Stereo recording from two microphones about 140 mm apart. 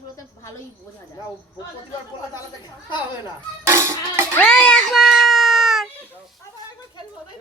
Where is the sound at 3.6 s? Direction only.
20° right (ahead or behind).